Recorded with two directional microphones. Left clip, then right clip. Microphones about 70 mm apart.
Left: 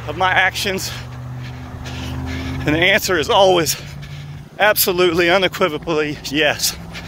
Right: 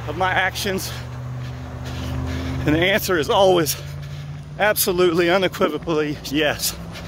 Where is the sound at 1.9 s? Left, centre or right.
Right.